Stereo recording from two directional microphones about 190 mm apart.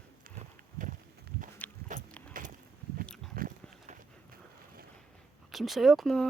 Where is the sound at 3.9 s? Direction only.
50° right (ahead or behind).